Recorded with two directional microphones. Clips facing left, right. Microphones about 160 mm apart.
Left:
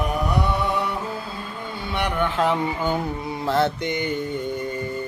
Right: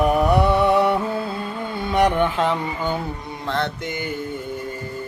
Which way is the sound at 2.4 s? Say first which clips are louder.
Left 1 dB; 5° left (ahead or behind).